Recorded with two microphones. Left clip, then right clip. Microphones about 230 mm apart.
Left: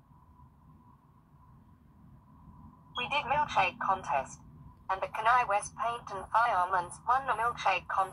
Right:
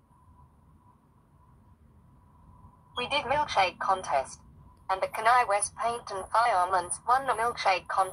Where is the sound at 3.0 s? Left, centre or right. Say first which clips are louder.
Right 2 dB; right.